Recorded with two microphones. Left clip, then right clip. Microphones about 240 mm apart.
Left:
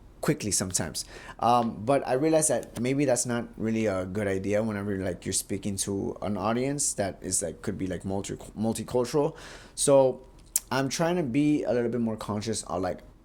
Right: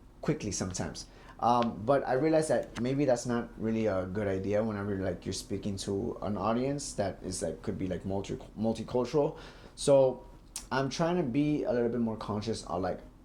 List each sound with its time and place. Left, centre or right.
0.2 s speech: left